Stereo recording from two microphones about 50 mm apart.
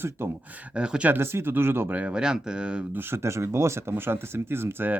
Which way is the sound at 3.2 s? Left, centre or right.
Right.